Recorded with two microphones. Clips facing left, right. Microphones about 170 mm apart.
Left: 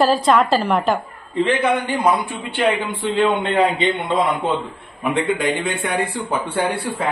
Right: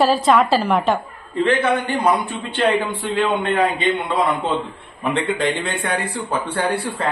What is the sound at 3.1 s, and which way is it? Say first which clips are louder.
Speech: left 2 dB; 20° left (ahead or behind).